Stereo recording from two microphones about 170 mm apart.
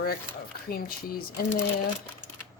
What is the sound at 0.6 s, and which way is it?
Speech, 60° left (ahead or behind).